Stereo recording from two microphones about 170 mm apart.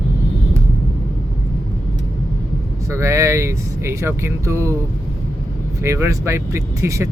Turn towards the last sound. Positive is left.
turn(degrees=-15)  # may be behind; listen again after turning